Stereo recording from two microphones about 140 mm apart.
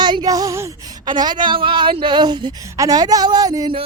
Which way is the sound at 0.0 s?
30° right (ahead or behind).